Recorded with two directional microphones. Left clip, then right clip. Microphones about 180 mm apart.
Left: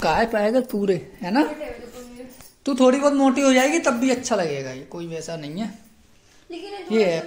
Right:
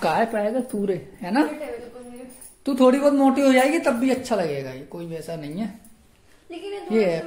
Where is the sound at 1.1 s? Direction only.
10° left (ahead or behind).